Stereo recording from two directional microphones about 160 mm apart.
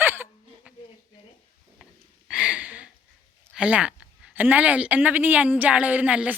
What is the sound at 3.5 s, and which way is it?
A woman's voice, 10° right (ahead or behind).